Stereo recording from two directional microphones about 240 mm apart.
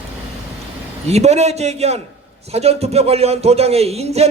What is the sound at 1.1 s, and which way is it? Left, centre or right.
Speech, right.